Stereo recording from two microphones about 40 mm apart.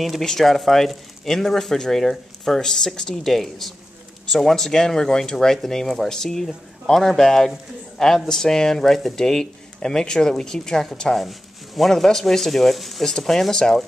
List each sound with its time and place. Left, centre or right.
0.2 s speech: centre
3.3 s speech: centre
11.1 s speech: centre